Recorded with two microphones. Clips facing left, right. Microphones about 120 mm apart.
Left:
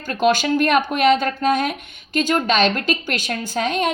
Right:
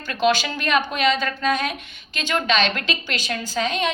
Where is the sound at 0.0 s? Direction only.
45° left (ahead or behind).